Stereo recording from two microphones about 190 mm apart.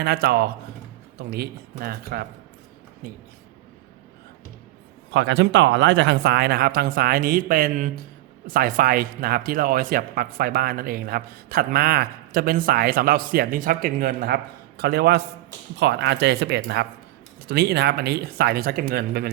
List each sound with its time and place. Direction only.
0.0 s speech: 60° right (ahead or behind)
5.1 s speech: 70° right (ahead or behind)